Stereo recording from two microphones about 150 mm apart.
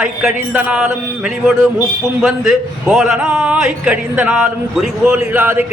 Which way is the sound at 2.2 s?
Centre (ahead or behind).